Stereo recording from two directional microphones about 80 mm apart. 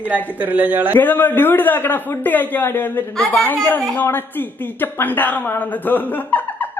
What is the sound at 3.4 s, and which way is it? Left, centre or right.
A woman's voice, left.